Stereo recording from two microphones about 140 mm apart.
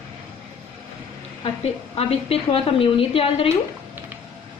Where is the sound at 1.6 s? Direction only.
45° left (ahead or behind).